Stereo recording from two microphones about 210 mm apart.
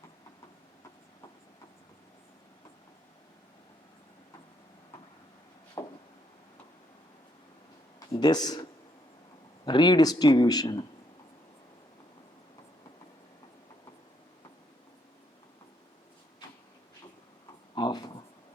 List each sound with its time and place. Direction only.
5.8 s a sound: 15° left (ahead or behind)
8.1 s speech: 20° left (ahead or behind)
9.6 s speech: 20° left (ahead or behind)
17.7 s writing: 20° left (ahead or behind)